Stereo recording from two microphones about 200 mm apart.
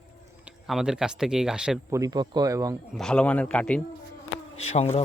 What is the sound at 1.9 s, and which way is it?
Speech, 15° right (ahead or behind).